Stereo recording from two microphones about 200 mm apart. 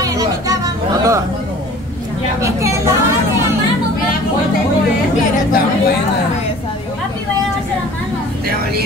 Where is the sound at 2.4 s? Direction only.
15° right (ahead or behind).